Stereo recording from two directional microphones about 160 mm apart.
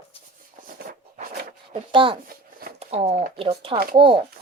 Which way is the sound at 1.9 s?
30° right (ahead or behind).